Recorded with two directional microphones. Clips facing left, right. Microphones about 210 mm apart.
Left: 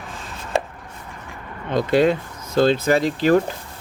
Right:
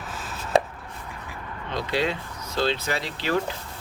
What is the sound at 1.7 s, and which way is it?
Speech, 50° left (ahead or behind).